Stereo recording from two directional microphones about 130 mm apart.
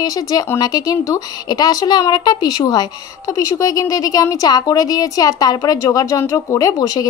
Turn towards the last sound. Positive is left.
turn(degrees=30)  # may be behind; listen again after turning